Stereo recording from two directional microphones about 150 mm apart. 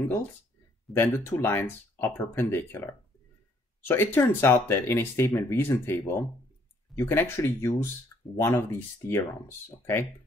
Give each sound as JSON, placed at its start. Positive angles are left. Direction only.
{"t": 0.9, "sound": "speech", "side_deg": 15}